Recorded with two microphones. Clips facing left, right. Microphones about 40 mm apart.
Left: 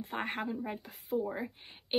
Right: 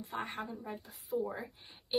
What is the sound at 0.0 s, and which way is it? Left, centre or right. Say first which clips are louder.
Speech: left 4 dB; left.